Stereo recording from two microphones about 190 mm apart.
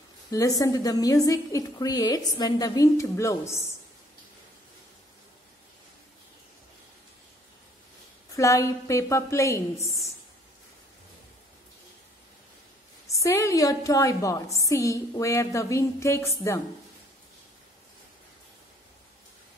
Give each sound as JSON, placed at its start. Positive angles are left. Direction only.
{"t": 0.3, "sound": "a woman's voice", "side_deg": 20}
{"t": 8.3, "sound": "a woman's voice", "side_deg": 15}
{"t": 13.0, "sound": "a woman's voice", "side_deg": 15}